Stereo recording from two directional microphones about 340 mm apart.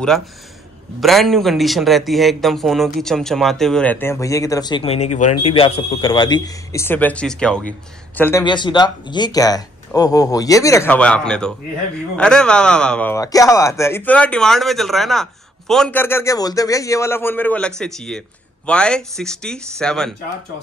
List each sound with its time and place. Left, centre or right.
1.0 s a man's voice: centre